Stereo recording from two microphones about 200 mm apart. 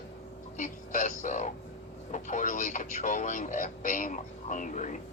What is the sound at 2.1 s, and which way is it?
Speech, 40° left (ahead or behind).